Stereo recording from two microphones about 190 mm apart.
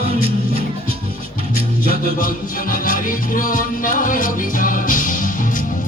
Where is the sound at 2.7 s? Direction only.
45° left (ahead or behind).